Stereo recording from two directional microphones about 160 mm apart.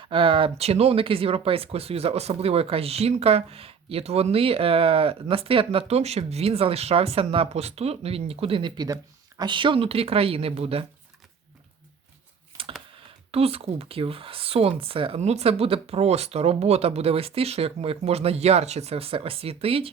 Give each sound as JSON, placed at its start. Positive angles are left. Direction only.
{"t": 0.1, "sound": "speech", "side_deg": -35}
{"t": 13.3, "sound": "speech", "side_deg": -40}